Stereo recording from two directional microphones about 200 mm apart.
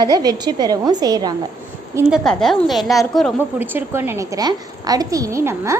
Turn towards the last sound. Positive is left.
turn(degrees=-15)  # may be behind; listen again after turning